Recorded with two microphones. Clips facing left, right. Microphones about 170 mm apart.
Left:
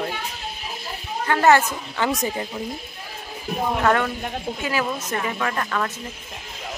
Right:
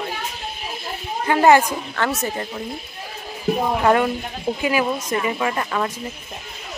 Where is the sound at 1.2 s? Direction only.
15° right (ahead or behind).